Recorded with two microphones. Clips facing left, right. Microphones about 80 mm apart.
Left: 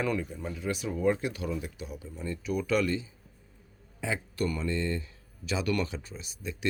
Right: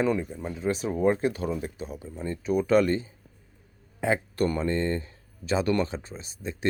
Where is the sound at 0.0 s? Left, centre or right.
Right.